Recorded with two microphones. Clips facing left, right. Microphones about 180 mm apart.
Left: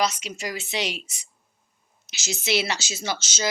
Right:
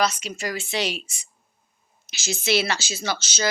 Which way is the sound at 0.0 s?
20° left (ahead or behind).